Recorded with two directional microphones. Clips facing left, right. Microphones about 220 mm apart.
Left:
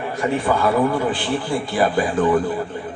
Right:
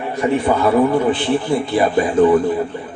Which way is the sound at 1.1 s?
25° right (ahead or behind).